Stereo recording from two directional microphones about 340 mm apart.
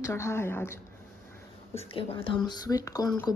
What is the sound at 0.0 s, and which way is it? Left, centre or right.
Speech, centre.